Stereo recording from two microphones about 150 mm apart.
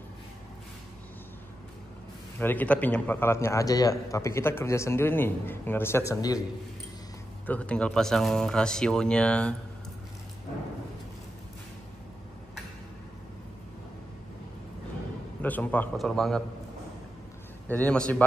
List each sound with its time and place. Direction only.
2.3 s a man's voice: 10° left (ahead or behind)
7.4 s speech: 10° left (ahead or behind)
15.4 s a man's voice: 10° left (ahead or behind)
17.6 s a man's voice: 10° left (ahead or behind)